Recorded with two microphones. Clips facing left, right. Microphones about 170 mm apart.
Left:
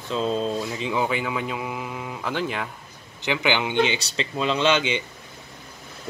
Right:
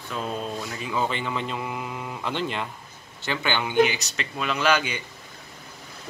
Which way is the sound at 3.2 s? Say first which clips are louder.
Left 3 dB; 15° left (ahead or behind).